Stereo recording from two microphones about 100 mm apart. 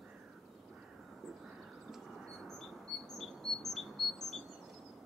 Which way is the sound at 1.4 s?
Centre (ahead or behind).